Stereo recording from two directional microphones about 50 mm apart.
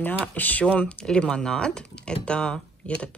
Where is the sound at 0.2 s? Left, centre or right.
Left.